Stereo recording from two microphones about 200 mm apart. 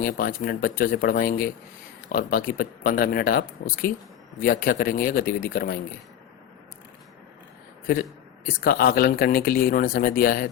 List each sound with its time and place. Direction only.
0.0 s speech: 45° left (ahead or behind)
8.4 s speech: 45° left (ahead or behind)